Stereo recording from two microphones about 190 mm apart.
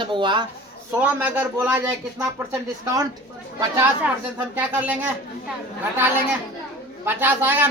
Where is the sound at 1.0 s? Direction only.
10° right (ahead or behind).